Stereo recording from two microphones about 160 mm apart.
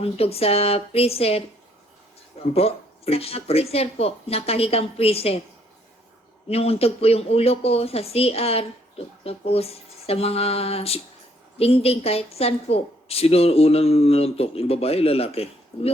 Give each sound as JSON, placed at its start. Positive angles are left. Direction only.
{"t": 0.0, "sound": "a woman's voice", "side_deg": 40}
{"t": 6.5, "sound": "a woman's voice", "side_deg": 40}